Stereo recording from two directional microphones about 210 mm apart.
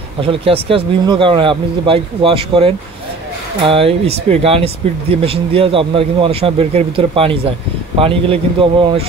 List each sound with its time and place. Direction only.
0.2 s speech: 25° right (ahead or behind)